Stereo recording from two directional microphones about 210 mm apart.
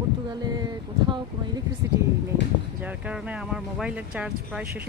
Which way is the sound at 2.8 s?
5° right (ahead or behind).